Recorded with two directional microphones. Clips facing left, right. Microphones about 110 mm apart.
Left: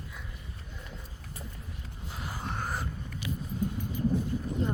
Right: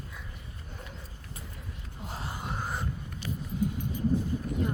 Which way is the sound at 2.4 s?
5° right (ahead or behind).